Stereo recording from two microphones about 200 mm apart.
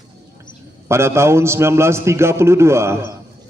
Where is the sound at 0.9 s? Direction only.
15° right (ahead or behind).